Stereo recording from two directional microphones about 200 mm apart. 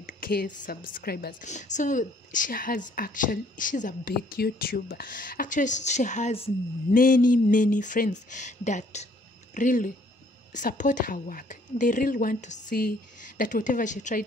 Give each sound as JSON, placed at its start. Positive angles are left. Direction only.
{"t": 0.0, "sound": "a woman's voice", "side_deg": 50}
{"t": 1.5, "sound": "a woman's voice", "side_deg": 35}
{"t": 6.9, "sound": "a woman's voice", "side_deg": 45}